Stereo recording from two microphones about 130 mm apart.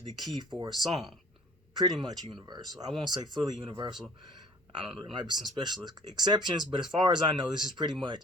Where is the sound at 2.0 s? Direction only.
30° right (ahead or behind).